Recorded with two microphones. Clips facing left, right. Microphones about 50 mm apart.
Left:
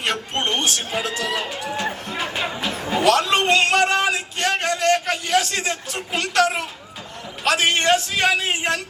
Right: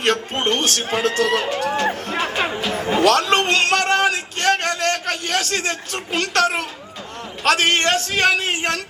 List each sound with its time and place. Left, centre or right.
0.0 s a man's voice: right
3.1 s a sound: right
7.4 s a man's voice: right